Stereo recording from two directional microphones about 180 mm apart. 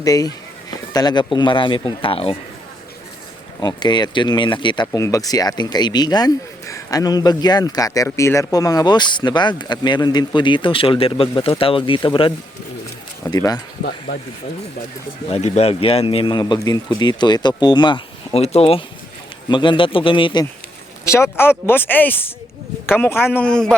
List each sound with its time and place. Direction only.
0.0 s speech: 20° left (ahead or behind)
3.6 s speech: 25° left (ahead or behind)
15.3 s speech: 35° left (ahead or behind)
21.0 s speech: 15° left (ahead or behind)